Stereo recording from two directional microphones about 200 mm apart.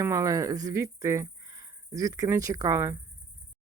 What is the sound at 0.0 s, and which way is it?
Speech, 15° right (ahead or behind).